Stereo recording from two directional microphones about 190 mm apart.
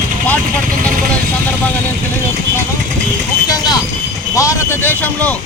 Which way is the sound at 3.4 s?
20° left (ahead or behind).